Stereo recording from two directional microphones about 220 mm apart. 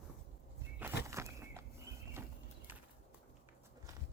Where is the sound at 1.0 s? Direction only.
10° right (ahead or behind).